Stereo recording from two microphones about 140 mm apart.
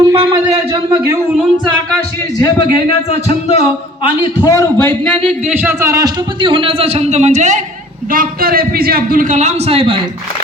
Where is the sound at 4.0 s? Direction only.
35° left (ahead or behind).